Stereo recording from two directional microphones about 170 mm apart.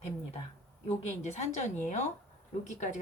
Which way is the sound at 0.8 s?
40° left (ahead or behind).